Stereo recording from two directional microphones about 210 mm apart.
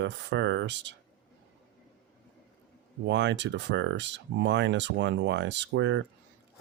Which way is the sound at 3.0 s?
55° right (ahead or behind).